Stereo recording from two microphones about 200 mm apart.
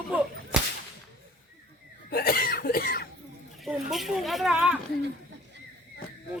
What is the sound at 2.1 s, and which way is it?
Cough, 50° left (ahead or behind).